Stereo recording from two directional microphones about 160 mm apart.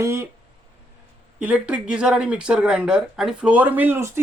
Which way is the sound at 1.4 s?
10° right (ahead or behind).